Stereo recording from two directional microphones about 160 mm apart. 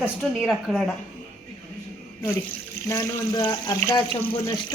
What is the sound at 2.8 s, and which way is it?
Speech, 20° left (ahead or behind).